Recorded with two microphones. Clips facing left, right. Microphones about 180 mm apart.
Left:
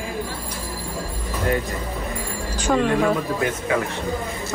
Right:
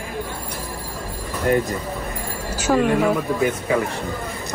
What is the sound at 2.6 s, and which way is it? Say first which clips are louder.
Speech: right 2 dB; 5° right (ahead or behind).